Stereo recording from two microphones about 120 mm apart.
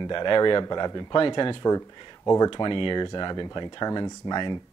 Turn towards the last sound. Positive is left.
turn(degrees=40)  # may be behind; listen again after turning